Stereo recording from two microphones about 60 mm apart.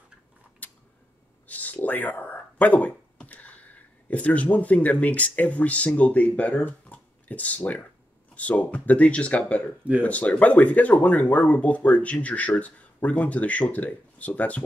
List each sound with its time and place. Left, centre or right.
0.6 s camera: left
1.5 s a sound: left
4.1 s speech: left